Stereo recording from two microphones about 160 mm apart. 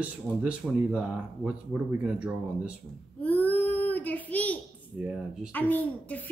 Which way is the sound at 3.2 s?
10° left (ahead or behind).